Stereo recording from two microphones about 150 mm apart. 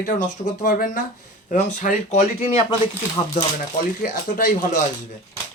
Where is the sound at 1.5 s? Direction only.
50° left (ahead or behind).